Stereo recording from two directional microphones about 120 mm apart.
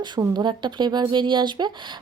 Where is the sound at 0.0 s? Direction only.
35° right (ahead or behind).